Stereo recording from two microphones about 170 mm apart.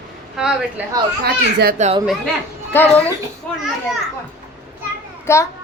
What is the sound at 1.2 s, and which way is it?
Speech, 70° right (ahead or behind).